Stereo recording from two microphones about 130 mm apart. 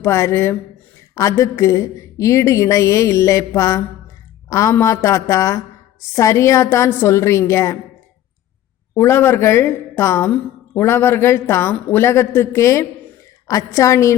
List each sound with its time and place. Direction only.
0.0 s a woman's voice: 20° left (ahead or behind)
9.0 s a woman's voice: 20° left (ahead or behind)